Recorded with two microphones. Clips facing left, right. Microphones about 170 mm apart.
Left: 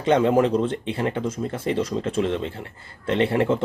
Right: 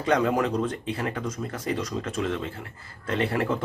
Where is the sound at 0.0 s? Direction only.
25° left (ahead or behind).